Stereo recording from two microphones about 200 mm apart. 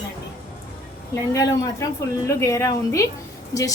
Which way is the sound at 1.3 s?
15° left (ahead or behind).